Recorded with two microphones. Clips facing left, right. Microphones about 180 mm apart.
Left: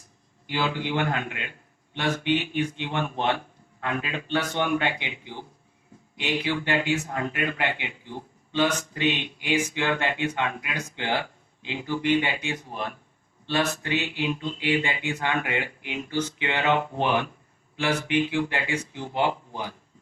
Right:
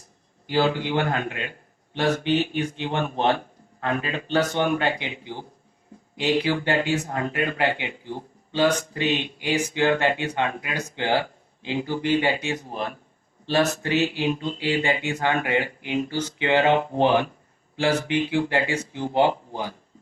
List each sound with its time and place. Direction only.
0.4 s speech: 40° right (ahead or behind)
6.1 s speech: 40° right (ahead or behind)
8.5 s speech: 35° right (ahead or behind)